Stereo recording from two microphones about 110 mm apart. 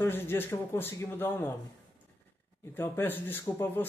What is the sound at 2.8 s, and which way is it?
Speech, 20° left (ahead or behind).